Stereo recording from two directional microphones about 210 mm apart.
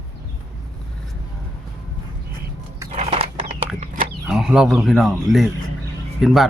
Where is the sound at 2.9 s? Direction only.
30° right (ahead or behind).